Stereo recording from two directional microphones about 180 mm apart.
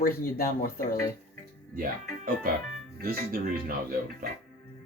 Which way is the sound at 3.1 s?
55° right (ahead or behind).